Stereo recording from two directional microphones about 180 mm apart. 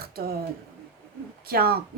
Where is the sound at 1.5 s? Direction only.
60° right (ahead or behind).